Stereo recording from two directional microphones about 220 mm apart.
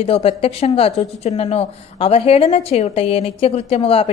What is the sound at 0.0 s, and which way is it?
Speech, 25° left (ahead or behind).